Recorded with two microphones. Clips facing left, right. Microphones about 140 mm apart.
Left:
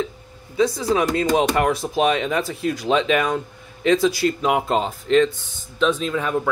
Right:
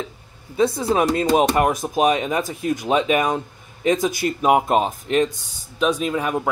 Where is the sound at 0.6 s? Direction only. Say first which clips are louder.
Right 1 dB; 55° right (ahead or behind).